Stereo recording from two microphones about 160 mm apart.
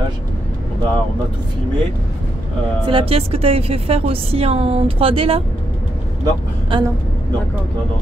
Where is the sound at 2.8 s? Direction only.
35° right (ahead or behind).